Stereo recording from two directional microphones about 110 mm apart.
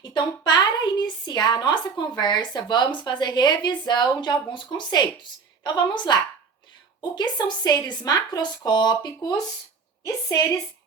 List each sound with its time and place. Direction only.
0.0 s a woman's voice: 45° left (ahead or behind)
7.2 s a woman's voice: 40° left (ahead or behind)